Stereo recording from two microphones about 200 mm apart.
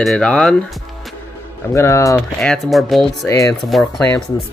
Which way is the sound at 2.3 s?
Centre (ahead or behind).